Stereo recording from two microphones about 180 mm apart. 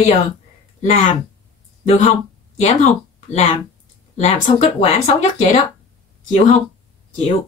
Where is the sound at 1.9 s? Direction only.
40° left (ahead or behind).